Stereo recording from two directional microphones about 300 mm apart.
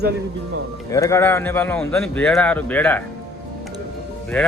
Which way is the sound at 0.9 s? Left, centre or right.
Centre.